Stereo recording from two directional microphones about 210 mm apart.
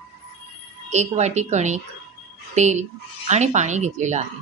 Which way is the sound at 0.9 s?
35° right (ahead or behind).